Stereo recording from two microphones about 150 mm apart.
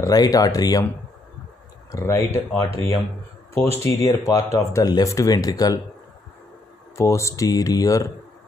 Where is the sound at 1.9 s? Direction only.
15° left (ahead or behind).